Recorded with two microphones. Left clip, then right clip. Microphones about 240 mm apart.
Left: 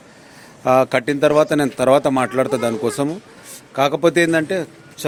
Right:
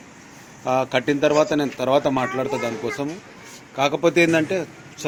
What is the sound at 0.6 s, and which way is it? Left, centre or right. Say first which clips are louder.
A man's voice: left 6 dB; left.